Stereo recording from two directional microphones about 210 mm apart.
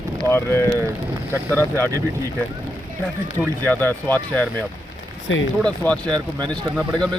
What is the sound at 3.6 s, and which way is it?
Speech, 10° left (ahead or behind).